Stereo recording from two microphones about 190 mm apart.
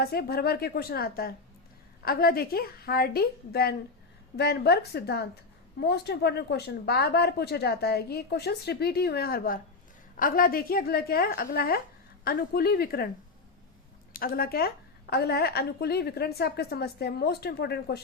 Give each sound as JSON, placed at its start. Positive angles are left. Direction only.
{"t": 0.0, "sound": "a woman's voice", "side_deg": 55}
{"t": 14.1, "sound": "speech", "side_deg": 50}